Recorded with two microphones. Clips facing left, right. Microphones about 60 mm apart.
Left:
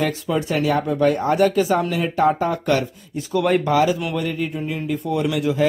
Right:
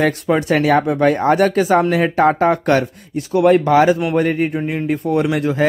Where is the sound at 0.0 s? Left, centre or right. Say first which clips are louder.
Right 5 dB; right.